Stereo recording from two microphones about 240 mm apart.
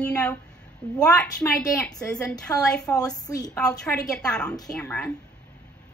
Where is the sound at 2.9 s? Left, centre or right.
Centre.